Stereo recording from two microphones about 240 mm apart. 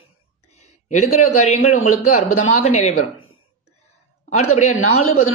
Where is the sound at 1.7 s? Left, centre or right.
Left.